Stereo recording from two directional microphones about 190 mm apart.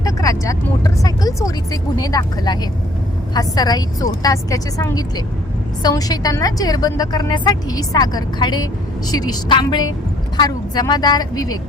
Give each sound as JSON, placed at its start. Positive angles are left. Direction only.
{"t": 0.0, "sound": "vehicle", "side_deg": 20}
{"t": 0.9, "sound": "a woman's voice", "side_deg": 20}